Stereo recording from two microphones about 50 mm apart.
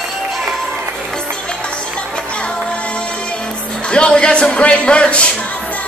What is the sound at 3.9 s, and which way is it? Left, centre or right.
Speech, centre.